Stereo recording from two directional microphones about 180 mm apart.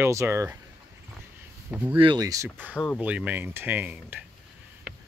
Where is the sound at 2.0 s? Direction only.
25° right (ahead or behind).